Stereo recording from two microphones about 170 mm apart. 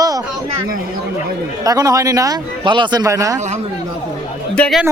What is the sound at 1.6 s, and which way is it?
Speech, 20° right (ahead or behind).